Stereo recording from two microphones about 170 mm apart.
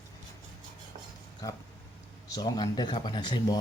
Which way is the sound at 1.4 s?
20° left (ahead or behind).